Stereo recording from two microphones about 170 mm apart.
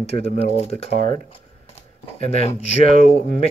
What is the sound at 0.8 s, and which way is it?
Speech, 55° right (ahead or behind).